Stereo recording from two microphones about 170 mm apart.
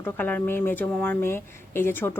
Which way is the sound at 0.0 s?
10° left (ahead or behind).